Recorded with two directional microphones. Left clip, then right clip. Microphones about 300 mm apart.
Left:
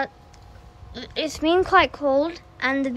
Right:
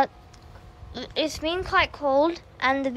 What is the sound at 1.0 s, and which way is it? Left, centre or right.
A woman's voice, centre.